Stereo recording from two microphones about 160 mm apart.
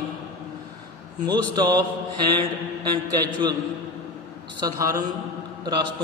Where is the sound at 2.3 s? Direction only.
30° right (ahead or behind).